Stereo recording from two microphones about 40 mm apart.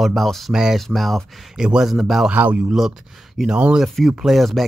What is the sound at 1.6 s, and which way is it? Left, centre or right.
Speech, right.